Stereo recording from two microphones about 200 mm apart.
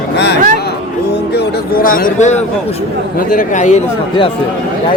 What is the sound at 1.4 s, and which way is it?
Speech, 45° left (ahead or behind).